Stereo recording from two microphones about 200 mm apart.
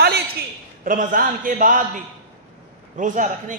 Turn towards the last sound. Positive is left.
turn(degrees=-40)  # may be behind; listen again after turning